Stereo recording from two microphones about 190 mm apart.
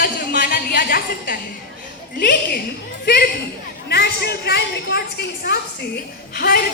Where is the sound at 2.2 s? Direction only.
55° left (ahead or behind).